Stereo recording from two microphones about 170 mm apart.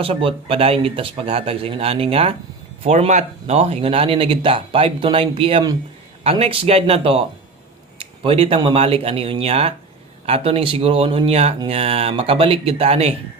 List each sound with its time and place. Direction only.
0.0 s speech: 30° right (ahead or behind)